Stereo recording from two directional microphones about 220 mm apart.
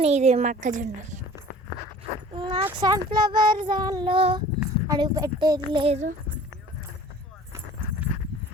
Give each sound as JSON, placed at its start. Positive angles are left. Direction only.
{"t": 0.0, "sound": "a woman's voice", "side_deg": -30}
{"t": 2.3, "sound": "speech", "side_deg": -20}